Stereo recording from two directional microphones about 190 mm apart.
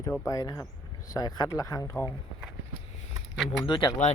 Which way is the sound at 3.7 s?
25° left (ahead or behind).